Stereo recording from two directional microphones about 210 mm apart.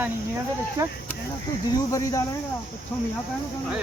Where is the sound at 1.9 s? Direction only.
15° left (ahead or behind).